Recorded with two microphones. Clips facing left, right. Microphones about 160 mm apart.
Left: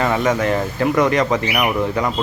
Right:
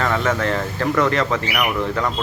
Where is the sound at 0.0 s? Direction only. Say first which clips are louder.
Left 3 dB; 15° left (ahead or behind).